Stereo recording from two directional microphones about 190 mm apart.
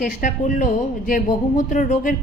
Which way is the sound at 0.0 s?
40° left (ahead or behind).